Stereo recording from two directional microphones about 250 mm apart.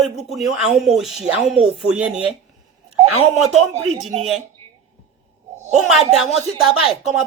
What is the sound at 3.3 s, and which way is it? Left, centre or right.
Speech, right.